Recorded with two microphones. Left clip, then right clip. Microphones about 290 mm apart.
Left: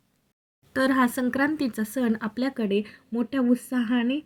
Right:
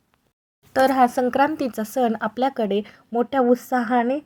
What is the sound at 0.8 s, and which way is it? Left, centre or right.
Speech, centre.